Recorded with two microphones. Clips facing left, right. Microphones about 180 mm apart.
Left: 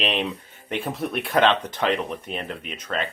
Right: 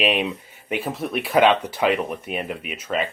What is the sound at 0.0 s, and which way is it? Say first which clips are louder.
Speech: right 4 dB; 10° right (ahead or behind).